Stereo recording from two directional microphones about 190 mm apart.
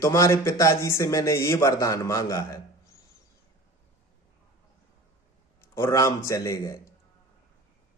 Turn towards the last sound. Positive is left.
turn(degrees=15)  # may be behind; listen again after turning